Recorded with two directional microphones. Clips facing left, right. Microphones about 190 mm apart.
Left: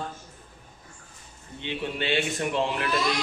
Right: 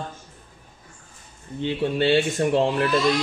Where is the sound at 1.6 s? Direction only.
40° right (ahead or behind).